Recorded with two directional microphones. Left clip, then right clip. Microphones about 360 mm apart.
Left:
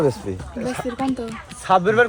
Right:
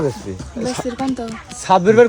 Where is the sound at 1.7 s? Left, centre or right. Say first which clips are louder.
Right 4 dB; right.